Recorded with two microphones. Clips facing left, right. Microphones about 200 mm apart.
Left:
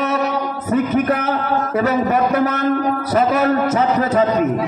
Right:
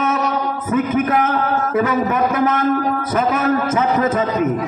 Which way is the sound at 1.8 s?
40° left (ahead or behind).